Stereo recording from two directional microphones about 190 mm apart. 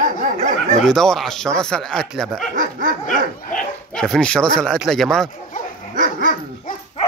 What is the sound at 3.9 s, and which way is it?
Speech, 5° left (ahead or behind).